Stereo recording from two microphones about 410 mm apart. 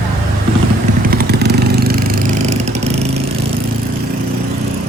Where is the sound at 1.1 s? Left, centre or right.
Right.